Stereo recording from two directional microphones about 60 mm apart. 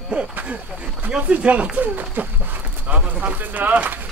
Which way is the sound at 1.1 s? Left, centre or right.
Right.